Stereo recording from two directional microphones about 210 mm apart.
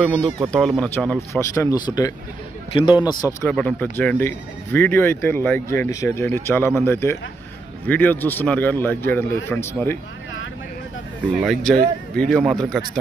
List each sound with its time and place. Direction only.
0.0 s a man's voice: 5° left (ahead or behind); by 3.0 s 20° left (ahead or behind)
3.3 s speech: 5° left (ahead or behind)
11.4 s speech: centre (ahead or behind)